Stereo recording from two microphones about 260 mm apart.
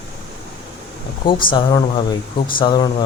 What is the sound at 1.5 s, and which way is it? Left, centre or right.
Speech, centre.